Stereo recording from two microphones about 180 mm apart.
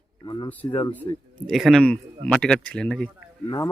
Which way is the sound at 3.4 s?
20° left (ahead or behind).